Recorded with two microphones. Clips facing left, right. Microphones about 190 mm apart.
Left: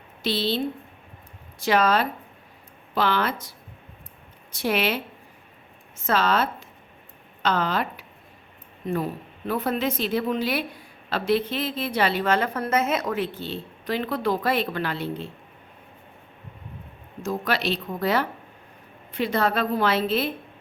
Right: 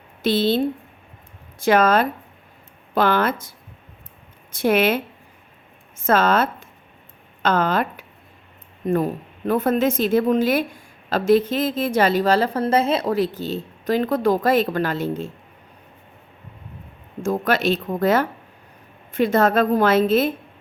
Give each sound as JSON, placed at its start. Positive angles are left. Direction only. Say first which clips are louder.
{"t": 0.2, "sound": "a woman's voice", "louder": "right 6 dB", "side_deg": -50}
{"t": 4.5, "sound": "a woman's voice", "louder": "right 6 dB", "side_deg": -50}
{"t": 6.1, "sound": "a woman's voice", "louder": "right 5 dB", "side_deg": -50}
{"t": 9.5, "sound": "a woman's voice", "louder": "right 6 dB", "side_deg": -50}
{"t": 17.2, "sound": "a woman's voice", "louder": "right 6 dB", "side_deg": -50}